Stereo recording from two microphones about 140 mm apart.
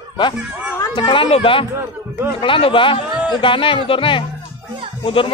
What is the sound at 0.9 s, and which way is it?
Speech, 35° left (ahead or behind).